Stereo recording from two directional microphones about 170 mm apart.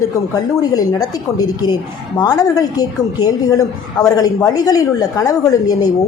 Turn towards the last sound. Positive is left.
turn(degrees=20)  # may be behind; listen again after turning